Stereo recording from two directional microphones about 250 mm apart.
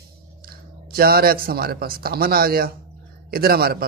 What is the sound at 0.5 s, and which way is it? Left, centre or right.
A man's voice, right.